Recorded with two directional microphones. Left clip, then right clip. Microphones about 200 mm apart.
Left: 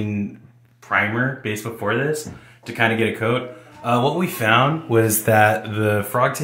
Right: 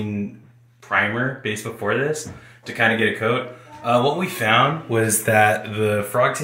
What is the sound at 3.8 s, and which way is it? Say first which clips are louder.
Speech: right 1 dB; 90° left.